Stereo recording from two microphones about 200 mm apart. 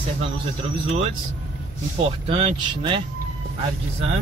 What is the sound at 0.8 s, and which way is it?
Speech, 30° right (ahead or behind).